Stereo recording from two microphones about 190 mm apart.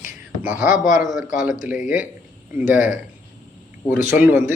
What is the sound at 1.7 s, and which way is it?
A man's voice, 40° left (ahead or behind).